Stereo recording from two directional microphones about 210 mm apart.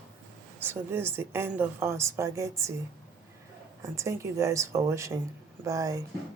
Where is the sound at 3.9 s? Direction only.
15° right (ahead or behind).